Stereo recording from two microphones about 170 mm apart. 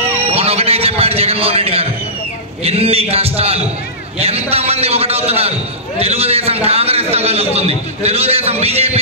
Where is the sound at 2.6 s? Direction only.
35° right (ahead or behind).